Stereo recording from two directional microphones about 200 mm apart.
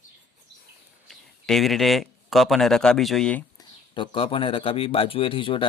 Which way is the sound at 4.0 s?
25° left (ahead or behind).